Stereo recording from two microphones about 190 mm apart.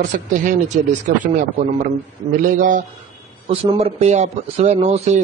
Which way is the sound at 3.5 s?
30° right (ahead or behind).